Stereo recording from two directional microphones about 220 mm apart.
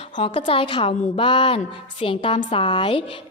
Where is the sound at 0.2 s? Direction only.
25° left (ahead or behind).